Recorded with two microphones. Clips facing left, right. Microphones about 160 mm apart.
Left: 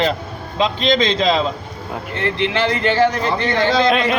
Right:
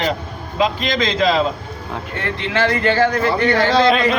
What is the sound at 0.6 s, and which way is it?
Speech, 25° left (ahead or behind).